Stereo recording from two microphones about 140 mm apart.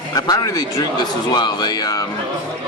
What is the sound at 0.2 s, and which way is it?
Speech, 25° left (ahead or behind).